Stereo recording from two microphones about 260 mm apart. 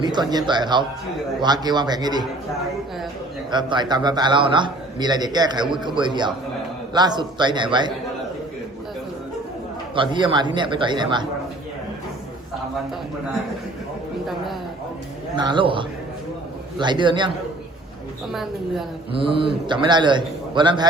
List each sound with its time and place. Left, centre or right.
0.0 s a man's voice: centre
3.5 s a man's voice: centre
9.9 s a man's voice: centre
15.4 s a man's voice: centre
19.1 s a man's voice: centre